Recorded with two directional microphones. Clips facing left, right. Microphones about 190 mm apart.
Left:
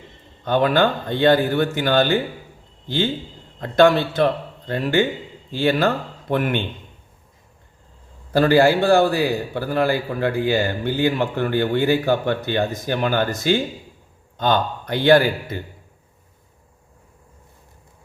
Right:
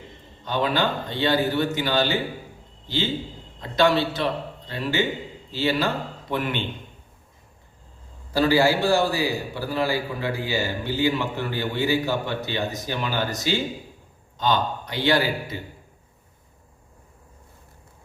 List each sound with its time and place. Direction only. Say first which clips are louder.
0.4 s a man's voice: left 6 dB; 55° left (ahead or behind)
8.3 s a man's voice: left 4 dB; 55° left (ahead or behind)